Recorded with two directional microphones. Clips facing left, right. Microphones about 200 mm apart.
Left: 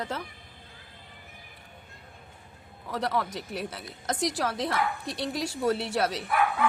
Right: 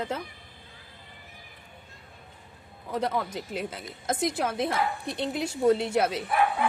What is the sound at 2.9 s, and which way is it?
Speech, 20° right (ahead or behind).